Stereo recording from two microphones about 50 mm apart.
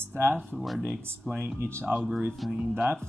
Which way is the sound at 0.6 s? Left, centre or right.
Centre.